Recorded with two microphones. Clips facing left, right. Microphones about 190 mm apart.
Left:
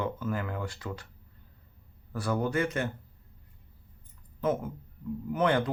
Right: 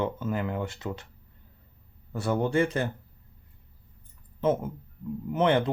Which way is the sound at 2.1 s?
25° right (ahead or behind).